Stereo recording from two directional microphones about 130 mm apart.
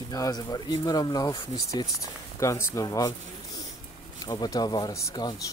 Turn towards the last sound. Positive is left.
turn(degrees=25)  # may be behind; listen again after turning